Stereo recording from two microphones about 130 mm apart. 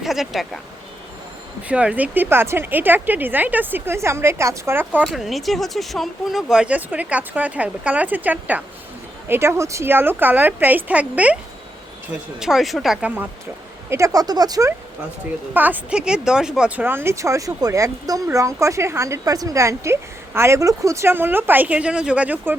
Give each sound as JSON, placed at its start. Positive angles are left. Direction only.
{"t": 0.0, "sound": "speech", "side_deg": 0}
{"t": 1.6, "sound": "speech", "side_deg": -10}
{"t": 5.0, "sound": "speech", "side_deg": 0}
{"t": 12.4, "sound": "speech", "side_deg": 0}
{"t": 13.9, "sound": "speech", "side_deg": -25}
{"t": 15.5, "sound": "speech", "side_deg": -15}